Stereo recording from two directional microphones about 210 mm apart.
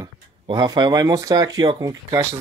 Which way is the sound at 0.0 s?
20° right (ahead or behind).